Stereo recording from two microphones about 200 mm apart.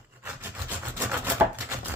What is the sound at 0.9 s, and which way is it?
Chopping, 10° right (ahead or behind).